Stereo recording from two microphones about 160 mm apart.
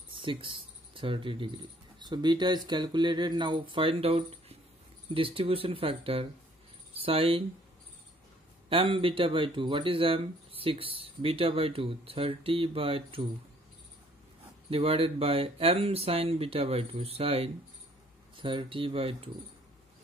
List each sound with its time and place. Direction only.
0.1 s speech: 35° right (ahead or behind)
8.6 s speech: 35° right (ahead or behind)
14.7 s speech: 35° right (ahead or behind)